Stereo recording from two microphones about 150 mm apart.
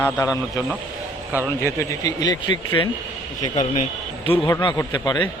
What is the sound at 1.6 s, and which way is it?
Speech, 20° left (ahead or behind).